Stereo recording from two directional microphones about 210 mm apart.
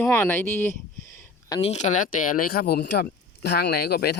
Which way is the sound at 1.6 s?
30° left (ahead or behind).